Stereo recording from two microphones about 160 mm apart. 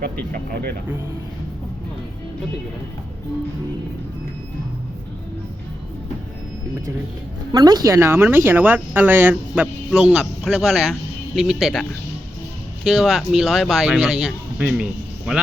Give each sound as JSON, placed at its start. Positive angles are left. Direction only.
{"t": 0.3, "sound": "speech", "side_deg": -80}
{"t": 7.5, "sound": "speech", "side_deg": -25}